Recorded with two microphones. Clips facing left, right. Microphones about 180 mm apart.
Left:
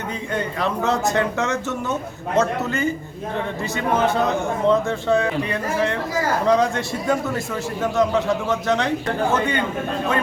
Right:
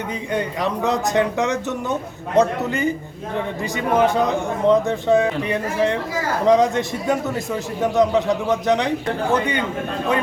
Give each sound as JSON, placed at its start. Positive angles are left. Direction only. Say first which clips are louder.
{"t": 0.3, "sound": "speech", "louder": "right 1 dB", "side_deg": -15}